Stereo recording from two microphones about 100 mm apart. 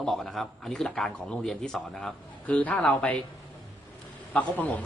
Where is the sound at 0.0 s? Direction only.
5° left (ahead or behind).